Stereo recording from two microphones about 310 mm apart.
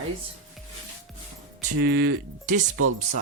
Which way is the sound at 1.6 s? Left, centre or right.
Right.